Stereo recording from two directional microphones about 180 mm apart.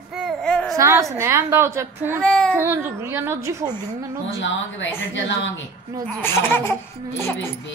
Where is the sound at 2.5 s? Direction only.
10° right (ahead or behind).